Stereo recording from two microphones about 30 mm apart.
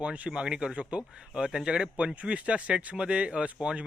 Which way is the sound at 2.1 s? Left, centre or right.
Right.